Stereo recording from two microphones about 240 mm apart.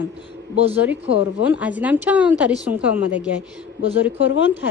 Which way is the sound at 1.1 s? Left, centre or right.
Left.